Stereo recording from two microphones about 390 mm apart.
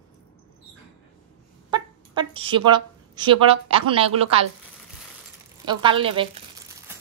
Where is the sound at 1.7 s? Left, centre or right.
Centre.